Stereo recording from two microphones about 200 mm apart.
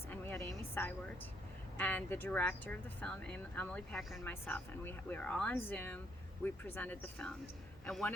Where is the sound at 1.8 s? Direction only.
10° left (ahead or behind).